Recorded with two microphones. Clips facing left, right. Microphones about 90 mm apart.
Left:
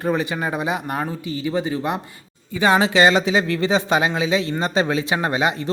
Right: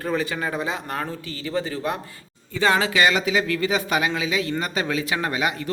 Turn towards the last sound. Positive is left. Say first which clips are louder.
# left 4 dB
turn(degrees=25)  # may be behind; listen again after turning